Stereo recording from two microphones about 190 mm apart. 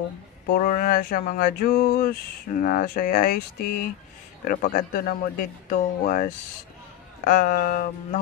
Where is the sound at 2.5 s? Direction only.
45° left (ahead or behind).